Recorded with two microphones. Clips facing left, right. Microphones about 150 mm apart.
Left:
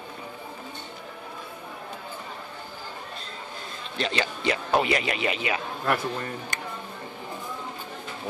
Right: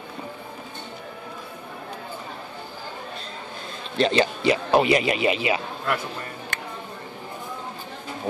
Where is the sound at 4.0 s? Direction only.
30° right (ahead or behind).